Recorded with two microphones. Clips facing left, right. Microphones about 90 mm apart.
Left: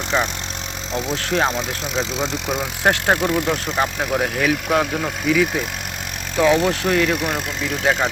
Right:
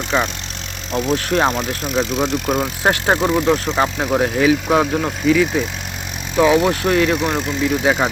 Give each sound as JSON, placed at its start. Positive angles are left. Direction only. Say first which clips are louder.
{"t": 0.1, "sound": "speech", "louder": "right 2 dB", "side_deg": 0}
{"t": 3.8, "sound": "speech", "louder": "right 3 dB", "side_deg": 0}